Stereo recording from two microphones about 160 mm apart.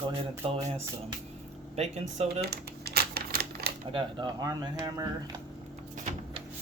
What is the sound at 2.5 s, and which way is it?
Typewriter, 85° right.